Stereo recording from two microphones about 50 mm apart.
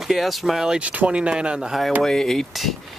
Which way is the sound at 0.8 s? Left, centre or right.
Right.